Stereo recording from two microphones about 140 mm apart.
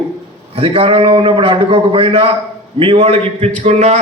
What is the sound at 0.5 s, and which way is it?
A man's voice, 45° right (ahead or behind).